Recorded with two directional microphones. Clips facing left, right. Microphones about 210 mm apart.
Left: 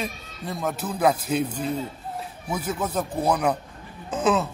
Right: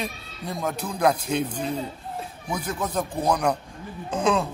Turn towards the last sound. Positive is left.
turn(degrees=5)  # may be behind; listen again after turning